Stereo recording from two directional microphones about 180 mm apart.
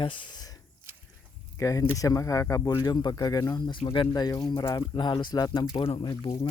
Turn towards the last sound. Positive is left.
turn(degrees=25)  # may be behind; listen again after turning